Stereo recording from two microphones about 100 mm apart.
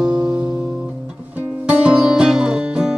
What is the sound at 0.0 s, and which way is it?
Music, 40° right (ahead or behind).